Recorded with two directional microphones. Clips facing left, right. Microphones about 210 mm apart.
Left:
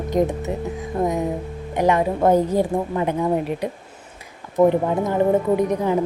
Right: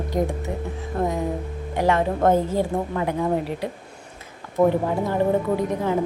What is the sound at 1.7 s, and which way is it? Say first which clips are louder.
Speech: left 2 dB; 15° left (ahead or behind).